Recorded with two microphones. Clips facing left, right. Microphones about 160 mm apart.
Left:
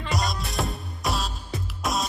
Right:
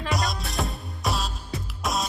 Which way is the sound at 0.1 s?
Centre (ahead or behind).